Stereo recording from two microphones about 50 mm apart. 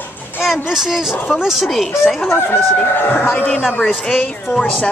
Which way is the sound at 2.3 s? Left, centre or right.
Left.